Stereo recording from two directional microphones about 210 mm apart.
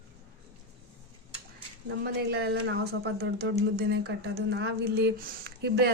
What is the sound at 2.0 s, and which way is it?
Speech, 50° right (ahead or behind).